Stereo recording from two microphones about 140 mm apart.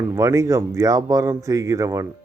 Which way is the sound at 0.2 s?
20° right (ahead or behind).